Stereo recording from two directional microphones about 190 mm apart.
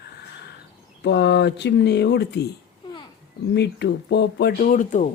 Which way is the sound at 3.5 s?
65° left (ahead or behind).